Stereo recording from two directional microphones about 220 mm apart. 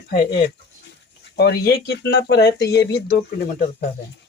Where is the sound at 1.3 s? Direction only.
45° left (ahead or behind).